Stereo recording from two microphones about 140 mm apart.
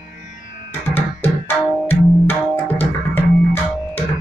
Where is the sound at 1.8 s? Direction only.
15° left (ahead or behind).